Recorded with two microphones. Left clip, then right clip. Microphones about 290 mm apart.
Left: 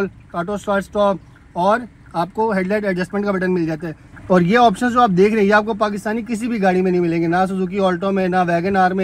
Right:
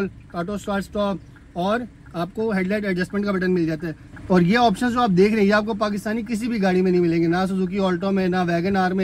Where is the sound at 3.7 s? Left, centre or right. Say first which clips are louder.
Left 2 dB; centre.